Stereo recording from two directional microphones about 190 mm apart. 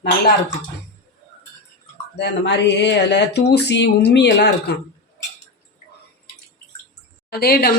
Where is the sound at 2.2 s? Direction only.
65° left (ahead or behind).